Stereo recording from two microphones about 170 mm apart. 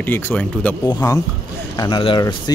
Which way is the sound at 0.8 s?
20° left (ahead or behind).